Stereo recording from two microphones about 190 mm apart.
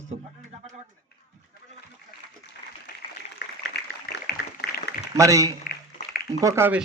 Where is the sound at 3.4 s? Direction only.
60° left (ahead or behind).